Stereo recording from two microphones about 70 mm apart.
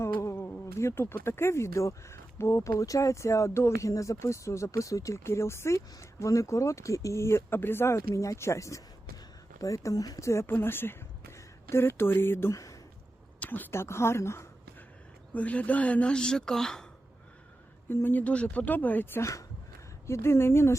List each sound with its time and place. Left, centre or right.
0.0 s a sound: left
0.8 s speech: left
10.4 s a woman's voice: left
12.5 s a sound: left
13.4 s a woman's voice: left
13.7 s speech: left
15.3 s speech: centre
17.8 s speech: left
19.2 s speech: left